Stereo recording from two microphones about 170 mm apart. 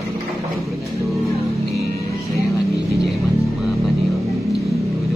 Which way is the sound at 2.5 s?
20° left (ahead or behind).